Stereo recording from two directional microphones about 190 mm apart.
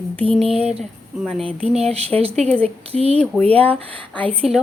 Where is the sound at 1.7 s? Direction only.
35° right (ahead or behind).